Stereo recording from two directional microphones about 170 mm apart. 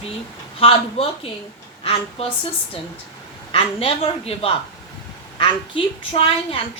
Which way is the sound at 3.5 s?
35° left (ahead or behind).